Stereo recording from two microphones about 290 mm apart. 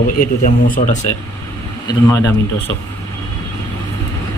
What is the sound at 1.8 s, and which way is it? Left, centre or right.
Speech, centre.